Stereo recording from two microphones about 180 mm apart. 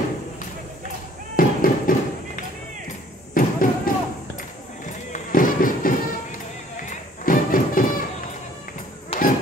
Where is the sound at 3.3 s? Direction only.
50° left (ahead or behind).